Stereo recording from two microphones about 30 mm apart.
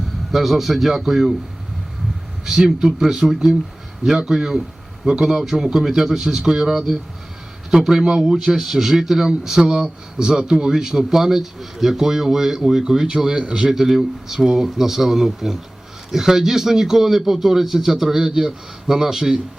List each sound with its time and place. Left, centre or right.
0.3 s a man's voice: centre
2.4 s a man's voice: centre
5.0 s speech: right
5.4 s a man's voice: centre
6.4 s speech: right
8.6 s a man's voice: centre; by 10.7 s right
10.7 s a man's voice: centre
13.7 s a man's voice: centre
14.4 s a man's voice: right